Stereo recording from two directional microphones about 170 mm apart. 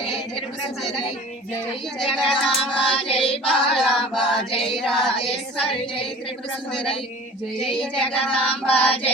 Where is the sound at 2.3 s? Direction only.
Centre (ahead or behind).